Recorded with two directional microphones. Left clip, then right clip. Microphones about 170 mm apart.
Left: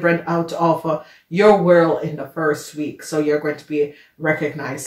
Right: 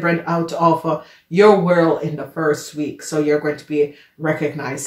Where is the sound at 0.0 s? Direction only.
30° right (ahead or behind).